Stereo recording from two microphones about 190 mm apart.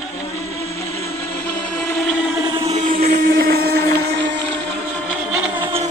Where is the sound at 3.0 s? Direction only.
50° right (ahead or behind).